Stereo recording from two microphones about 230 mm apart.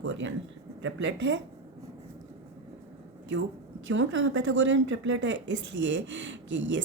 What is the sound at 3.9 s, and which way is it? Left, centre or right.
A woman's voice, right.